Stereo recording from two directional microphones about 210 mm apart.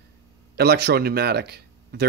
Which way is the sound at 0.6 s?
50° right (ahead or behind).